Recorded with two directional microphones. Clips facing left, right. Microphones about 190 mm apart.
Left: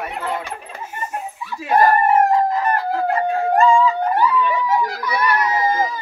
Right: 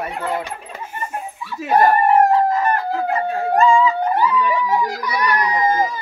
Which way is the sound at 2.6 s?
Centre (ahead or behind).